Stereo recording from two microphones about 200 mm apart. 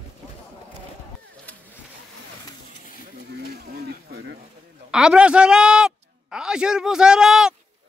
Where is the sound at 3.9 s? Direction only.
50° right (ahead or behind).